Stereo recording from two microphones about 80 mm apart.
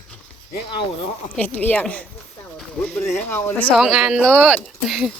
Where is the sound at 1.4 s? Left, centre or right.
Centre.